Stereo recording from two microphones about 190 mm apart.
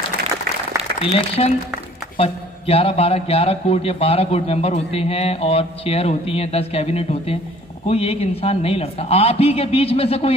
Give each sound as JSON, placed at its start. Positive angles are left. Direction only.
{"t": 1.1, "sound": "a man's voice", "side_deg": 35}